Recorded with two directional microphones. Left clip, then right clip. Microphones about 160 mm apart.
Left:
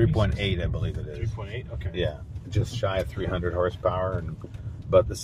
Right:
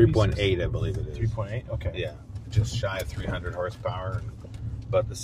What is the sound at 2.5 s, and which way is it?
Speech, 40° left (ahead or behind).